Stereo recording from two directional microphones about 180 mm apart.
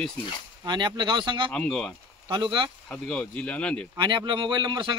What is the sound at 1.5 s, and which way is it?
Speech, 5° left (ahead or behind).